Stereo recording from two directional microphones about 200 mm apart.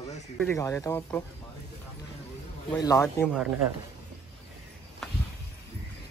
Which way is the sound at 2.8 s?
15° left (ahead or behind).